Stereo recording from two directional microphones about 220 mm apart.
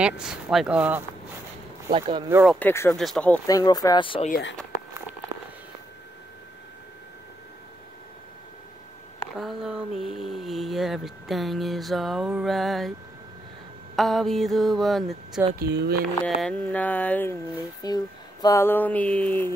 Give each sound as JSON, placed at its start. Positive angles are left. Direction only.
{"t": 0.0, "sound": "speech", "side_deg": -5}
{"t": 1.9, "sound": "speech", "side_deg": -25}
{"t": 2.2, "sound": "speech", "side_deg": -5}
{"t": 2.6, "sound": "speech", "side_deg": 10}
{"t": 3.0, "sound": "a sound", "side_deg": 5}
{"t": 3.4, "sound": "speech", "side_deg": 15}
{"t": 4.3, "sound": "speech", "side_deg": 50}
{"t": 9.4, "sound": "a sound", "side_deg": 0}
{"t": 13.9, "sound": "a sound", "side_deg": 0}
{"t": 15.6, "sound": "speech", "side_deg": -50}
{"t": 16.3, "sound": "speech", "side_deg": 5}